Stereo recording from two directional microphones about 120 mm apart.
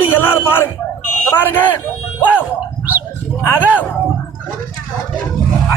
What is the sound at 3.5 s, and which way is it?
Speech, 15° left (ahead or behind).